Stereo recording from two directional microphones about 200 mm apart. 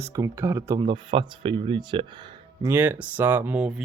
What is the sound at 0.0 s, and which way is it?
Speech, 15° right (ahead or behind).